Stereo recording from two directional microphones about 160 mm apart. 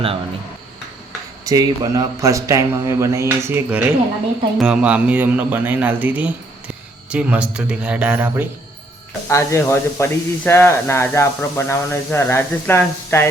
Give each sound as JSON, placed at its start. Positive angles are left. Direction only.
{"t": 1.5, "sound": "a man's voice", "side_deg": -25}
{"t": 9.3, "sound": "speech", "side_deg": 15}